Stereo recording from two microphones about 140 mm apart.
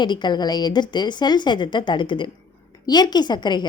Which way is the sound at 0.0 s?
30° left (ahead or behind).